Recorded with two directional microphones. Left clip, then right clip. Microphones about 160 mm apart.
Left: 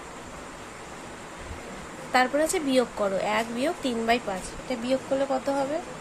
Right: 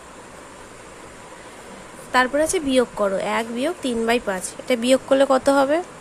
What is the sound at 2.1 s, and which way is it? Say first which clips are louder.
Speech: right 4 dB; 25° right (ahead or behind).